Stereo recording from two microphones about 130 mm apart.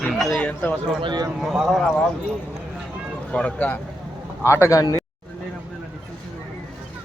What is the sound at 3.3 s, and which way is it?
Speech, 10° left (ahead or behind).